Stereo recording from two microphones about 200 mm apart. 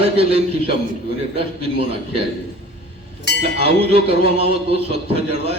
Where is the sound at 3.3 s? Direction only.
60° left (ahead or behind).